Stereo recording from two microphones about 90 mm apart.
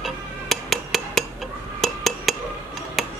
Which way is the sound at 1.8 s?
5° left (ahead or behind).